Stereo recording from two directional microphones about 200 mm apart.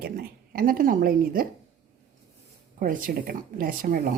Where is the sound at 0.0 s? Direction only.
50° right (ahead or behind).